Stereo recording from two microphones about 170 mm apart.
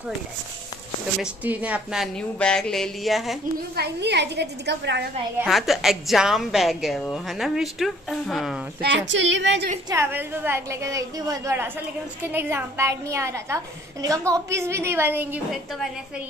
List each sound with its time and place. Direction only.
1.2 s a woman's voice: 10° right (ahead or behind)
3.7 s a woman's voice: 80° right
5.4 s a woman's voice: centre (ahead or behind)
8.8 s speech: 90° right
9.8 s a woman's voice: 15° right (ahead or behind)